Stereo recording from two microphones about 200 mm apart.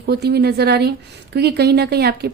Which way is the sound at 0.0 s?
55° right (ahead or behind).